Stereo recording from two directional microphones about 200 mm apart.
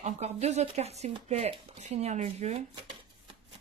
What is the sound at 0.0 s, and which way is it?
Speech, 35° right (ahead or behind).